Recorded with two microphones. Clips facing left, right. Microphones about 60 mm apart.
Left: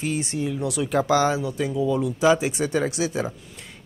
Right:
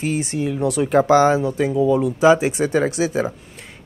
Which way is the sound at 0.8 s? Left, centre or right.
Right.